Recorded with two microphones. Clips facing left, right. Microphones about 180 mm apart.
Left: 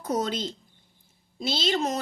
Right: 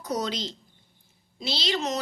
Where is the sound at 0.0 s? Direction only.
50° left (ahead or behind).